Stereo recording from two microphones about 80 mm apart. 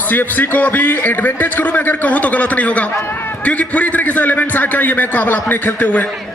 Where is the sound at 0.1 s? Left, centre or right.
Left.